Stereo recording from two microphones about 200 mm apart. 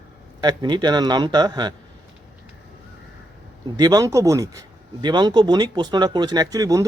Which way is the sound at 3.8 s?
20° right (ahead or behind).